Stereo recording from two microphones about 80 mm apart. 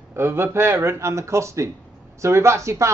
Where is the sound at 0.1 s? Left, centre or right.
Right.